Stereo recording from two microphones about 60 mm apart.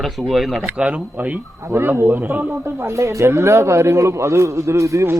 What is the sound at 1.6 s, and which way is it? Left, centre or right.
Speech, right.